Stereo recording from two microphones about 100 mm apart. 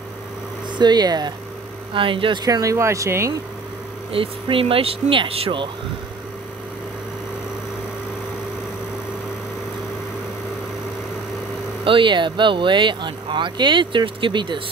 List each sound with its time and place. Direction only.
0.7 s speech: 45° right (ahead or behind)
2.0 s speech: 60° right (ahead or behind)
2.4 s speech: 35° right (ahead or behind)
4.1 s speech: 65° right (ahead or behind)
11.8 s speech: 55° right (ahead or behind)